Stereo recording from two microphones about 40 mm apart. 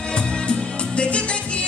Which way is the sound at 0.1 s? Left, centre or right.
Left.